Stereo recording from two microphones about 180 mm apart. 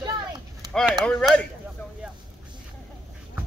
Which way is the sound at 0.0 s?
20° right (ahead or behind).